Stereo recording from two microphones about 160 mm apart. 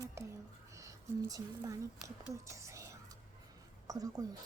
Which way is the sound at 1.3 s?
20° right (ahead or behind).